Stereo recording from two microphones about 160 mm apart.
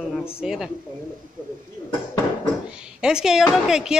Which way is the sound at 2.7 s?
5° right (ahead or behind).